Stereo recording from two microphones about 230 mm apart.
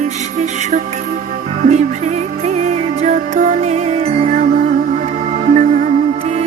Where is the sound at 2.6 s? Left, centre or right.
Right.